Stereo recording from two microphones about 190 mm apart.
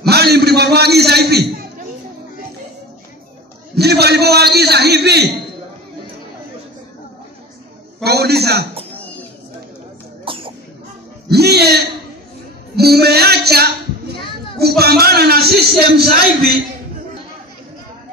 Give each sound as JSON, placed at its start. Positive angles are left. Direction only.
{"t": 0.1, "sound": "a sound", "side_deg": -60}
{"t": 3.7, "sound": "a man's voice", "side_deg": -60}
{"t": 8.0, "sound": "a man's voice", "side_deg": -60}
{"t": 10.2, "sound": "cough", "side_deg": -30}
{"t": 11.2, "sound": "a man's voice", "side_deg": -60}
{"t": 12.7, "sound": "music", "side_deg": -55}
{"t": 14.8, "sound": "a man's voice", "side_deg": -55}